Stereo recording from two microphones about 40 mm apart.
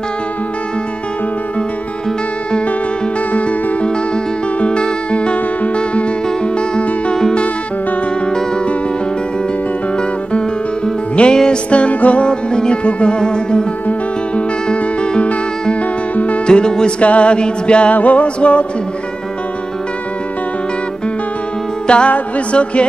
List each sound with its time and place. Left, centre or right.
4.6 s music: left
11.3 s music: centre
11.7 s music: left
12.3 s music: left
14.7 s music: left
16.4 s music: left
17.9 s music: left
21.8 s music: left